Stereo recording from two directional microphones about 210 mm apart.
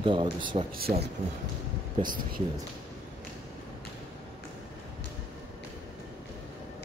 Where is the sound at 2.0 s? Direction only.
45° right (ahead or behind).